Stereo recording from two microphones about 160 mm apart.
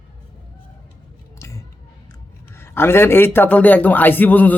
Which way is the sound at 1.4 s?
20° left (ahead or behind).